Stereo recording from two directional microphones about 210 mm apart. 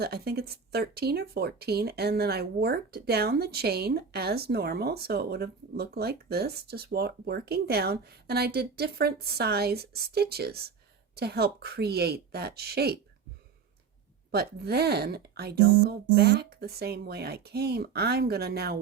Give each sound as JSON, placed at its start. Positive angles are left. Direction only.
{"t": 0.0, "sound": "speech", "side_deg": -50}
{"t": 14.3, "sound": "speech", "side_deg": -50}